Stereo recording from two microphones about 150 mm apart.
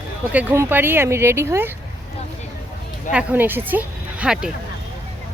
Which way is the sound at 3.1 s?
10° right (ahead or behind).